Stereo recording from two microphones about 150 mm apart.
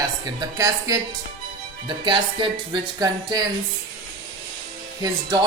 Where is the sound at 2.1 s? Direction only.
30° right (ahead or behind).